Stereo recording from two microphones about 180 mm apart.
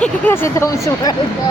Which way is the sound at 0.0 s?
15° left (ahead or behind).